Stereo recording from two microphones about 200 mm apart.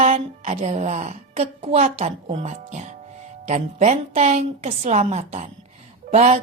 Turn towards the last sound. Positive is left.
turn(degrees=-35)  # may be behind; listen again after turning